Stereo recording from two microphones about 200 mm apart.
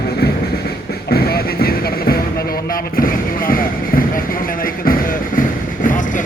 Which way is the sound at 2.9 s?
45° left (ahead or behind).